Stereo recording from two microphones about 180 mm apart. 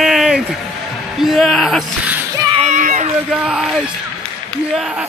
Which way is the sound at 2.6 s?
45° right (ahead or behind).